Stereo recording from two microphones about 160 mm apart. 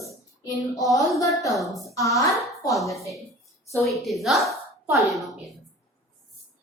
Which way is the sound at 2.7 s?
Centre (ahead or behind).